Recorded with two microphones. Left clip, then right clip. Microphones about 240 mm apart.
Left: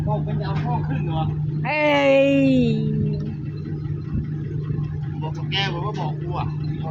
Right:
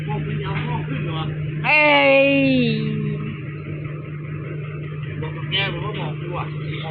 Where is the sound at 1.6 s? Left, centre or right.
Centre.